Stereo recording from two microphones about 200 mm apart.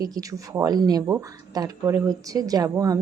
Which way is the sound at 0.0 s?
15° right (ahead or behind).